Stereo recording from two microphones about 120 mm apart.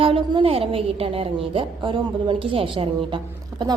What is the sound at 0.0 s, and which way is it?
A woman's voice, 50° right (ahead or behind).